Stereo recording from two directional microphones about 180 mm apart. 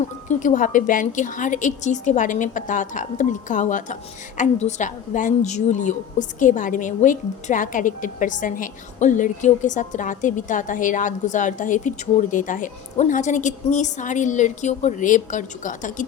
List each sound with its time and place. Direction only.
0.3 s a woman's voice: 45° left (ahead or behind)